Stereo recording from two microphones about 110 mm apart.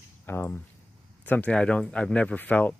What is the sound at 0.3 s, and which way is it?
Speech, 20° left (ahead or behind).